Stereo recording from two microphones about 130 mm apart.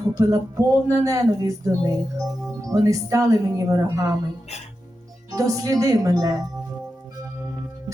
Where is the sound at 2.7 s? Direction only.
25° right (ahead or behind).